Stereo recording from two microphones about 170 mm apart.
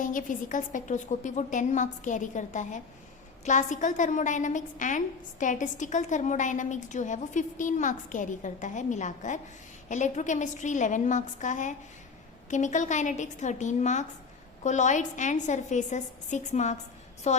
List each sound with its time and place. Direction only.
0.0 s a woman's voice: 50° left (ahead or behind)